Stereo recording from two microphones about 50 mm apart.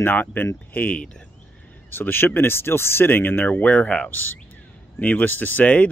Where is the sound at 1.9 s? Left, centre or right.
Left.